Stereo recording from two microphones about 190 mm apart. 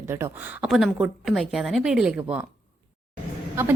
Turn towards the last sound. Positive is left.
turn(degrees=-15)  # may be behind; listen again after turning